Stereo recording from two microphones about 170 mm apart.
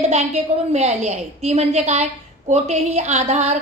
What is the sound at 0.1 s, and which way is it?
A woman's voice, 40° right (ahead or behind).